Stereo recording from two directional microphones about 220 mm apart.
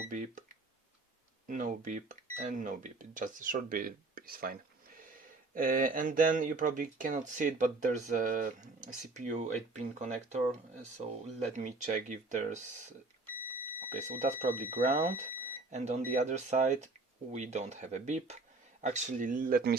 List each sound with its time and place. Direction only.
0.1 s speech: 35° right (ahead or behind)
5.5 s speech: 40° right (ahead or behind)
13.9 s speech: 35° right (ahead or behind)